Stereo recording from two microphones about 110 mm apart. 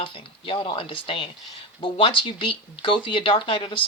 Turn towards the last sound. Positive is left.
turn(degrees=50)  # may be behind; listen again after turning